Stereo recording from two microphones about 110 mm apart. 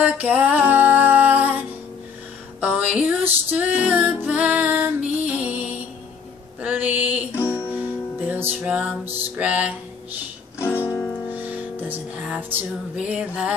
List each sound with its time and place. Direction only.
0.0 s music: 15° right (ahead or behind)
2.6 s music: 10° right (ahead or behind)
6.6 s a sound: 15° right (ahead or behind)
7.3 s music: 20° left (ahead or behind)
8.3 s music: 15° right (ahead or behind)
10.6 s music: 20° left (ahead or behind)
11.3 s music: 15° right (ahead or behind)